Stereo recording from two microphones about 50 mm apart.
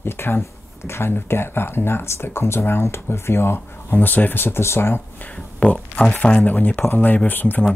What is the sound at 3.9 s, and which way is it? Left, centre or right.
Speech, left.